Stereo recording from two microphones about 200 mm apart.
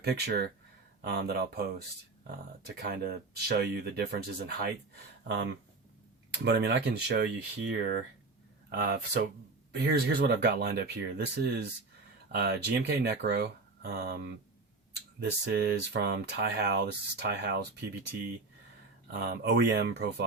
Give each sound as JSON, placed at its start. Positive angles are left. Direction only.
{"t": 0.0, "sound": "speech", "side_deg": -55}
{"t": 2.6, "sound": "speech", "side_deg": -50}
{"t": 6.4, "sound": "speech", "side_deg": -55}
{"t": 19.1, "sound": "speech", "side_deg": -50}